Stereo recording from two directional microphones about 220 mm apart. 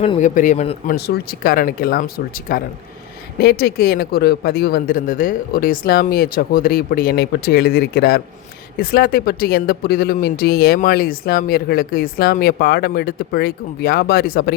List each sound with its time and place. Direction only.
0.0 s speech: 30° left (ahead or behind)
0.9 s speech: 45° left (ahead or behind)